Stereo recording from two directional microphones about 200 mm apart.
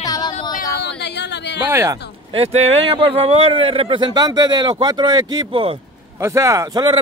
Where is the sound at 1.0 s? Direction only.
60° left (ahead or behind).